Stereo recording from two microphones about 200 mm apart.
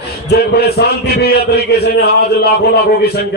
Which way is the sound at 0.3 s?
55° left (ahead or behind).